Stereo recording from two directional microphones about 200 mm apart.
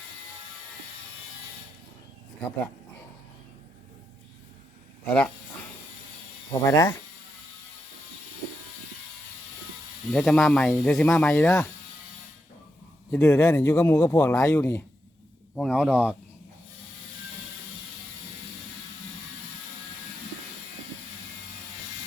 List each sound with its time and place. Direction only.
5.0 s speech: 5° left (ahead or behind)
6.5 s speech: 15° left (ahead or behind)
10.1 s speech: centre (ahead or behind)
13.1 s speech: 5° left (ahead or behind)
15.5 s speech: centre (ahead or behind)